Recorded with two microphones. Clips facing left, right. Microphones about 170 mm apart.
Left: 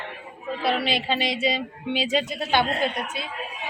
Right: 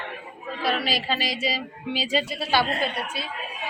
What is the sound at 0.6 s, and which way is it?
A woman's voice, 25° left (ahead or behind).